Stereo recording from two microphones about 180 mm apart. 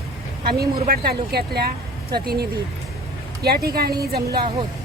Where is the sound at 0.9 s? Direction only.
60° right (ahead or behind).